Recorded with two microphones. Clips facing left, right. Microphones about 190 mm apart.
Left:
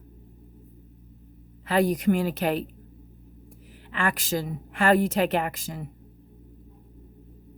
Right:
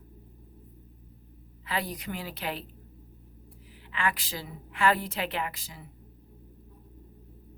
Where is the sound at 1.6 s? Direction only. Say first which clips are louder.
Left 12 dB; 45° left (ahead or behind).